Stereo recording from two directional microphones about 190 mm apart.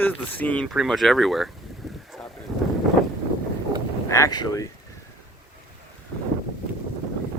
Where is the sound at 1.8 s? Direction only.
Centre (ahead or behind).